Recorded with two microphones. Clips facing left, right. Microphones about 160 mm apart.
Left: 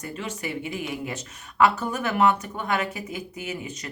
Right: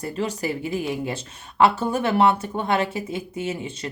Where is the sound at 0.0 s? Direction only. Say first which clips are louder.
Right 6 dB; 35° right (ahead or behind).